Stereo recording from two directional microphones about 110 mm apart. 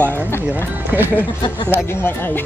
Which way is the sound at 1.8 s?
20° left (ahead or behind).